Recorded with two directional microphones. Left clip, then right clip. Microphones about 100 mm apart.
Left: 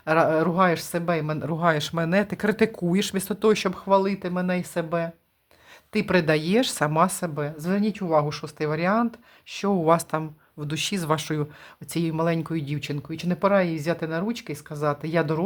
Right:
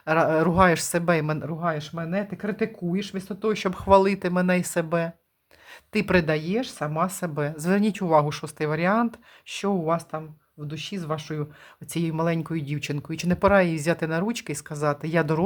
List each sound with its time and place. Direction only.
0.0 s speech: centre (ahead or behind)
0.3 s speech: 20° right (ahead or behind)
1.5 s speech: 30° left (ahead or behind)
3.8 s speech: 30° right (ahead or behind); by 6.1 s 15° right (ahead or behind)
6.3 s a woman's voice: 25° left (ahead or behind)
6.6 s speech: 35° left (ahead or behind)
7.3 s speech: 20° right (ahead or behind)
8.5 s speech: 10° right (ahead or behind)
9.8 s speech: 30° left (ahead or behind)
10.2 s speech: 50° left (ahead or behind)
11.9 s speech: 5° right (ahead or behind)
12.8 s speech: 25° right (ahead or behind)